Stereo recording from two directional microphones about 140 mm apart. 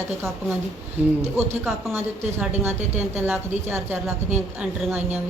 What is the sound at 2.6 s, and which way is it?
A man's voice, 10° right (ahead or behind).